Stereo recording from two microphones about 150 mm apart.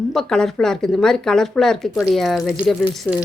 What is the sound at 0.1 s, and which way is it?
Speech, 5° left (ahead or behind).